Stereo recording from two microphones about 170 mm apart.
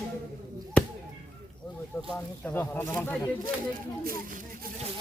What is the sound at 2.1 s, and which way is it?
Speech, 10° left (ahead or behind).